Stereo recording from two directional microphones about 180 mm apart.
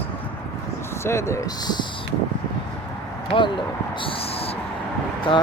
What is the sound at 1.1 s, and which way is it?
Speech, 15° left (ahead or behind).